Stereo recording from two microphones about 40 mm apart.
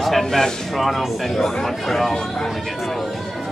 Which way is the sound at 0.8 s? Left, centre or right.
Centre.